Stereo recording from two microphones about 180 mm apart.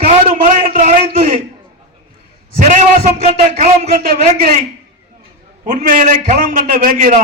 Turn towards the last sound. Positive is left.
turn(degrees=-50)  # may be behind; listen again after turning